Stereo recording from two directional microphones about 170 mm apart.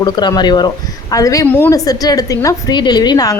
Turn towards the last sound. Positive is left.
turn(degrees=25)  # may be behind; listen again after turning